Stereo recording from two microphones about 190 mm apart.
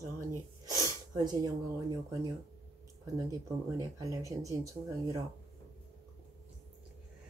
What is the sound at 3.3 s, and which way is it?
Speech, 20° right (ahead or behind).